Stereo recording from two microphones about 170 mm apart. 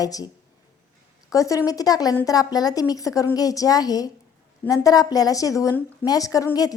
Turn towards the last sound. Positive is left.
turn(degrees=20)  # may be behind; listen again after turning